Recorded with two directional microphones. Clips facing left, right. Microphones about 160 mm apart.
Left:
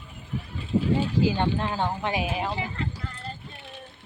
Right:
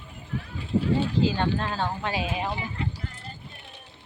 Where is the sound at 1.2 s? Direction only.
15° left (ahead or behind).